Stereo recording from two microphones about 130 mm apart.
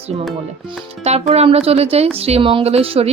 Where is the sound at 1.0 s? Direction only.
55° right (ahead or behind).